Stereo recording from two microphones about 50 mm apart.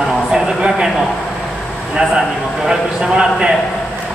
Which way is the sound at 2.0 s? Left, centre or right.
Centre.